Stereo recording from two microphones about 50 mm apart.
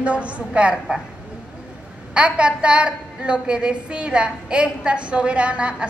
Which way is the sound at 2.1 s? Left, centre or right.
Right.